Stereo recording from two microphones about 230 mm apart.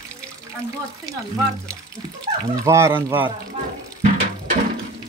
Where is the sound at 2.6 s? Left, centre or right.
Centre.